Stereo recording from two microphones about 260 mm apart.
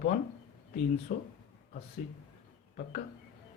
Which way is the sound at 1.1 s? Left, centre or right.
Left.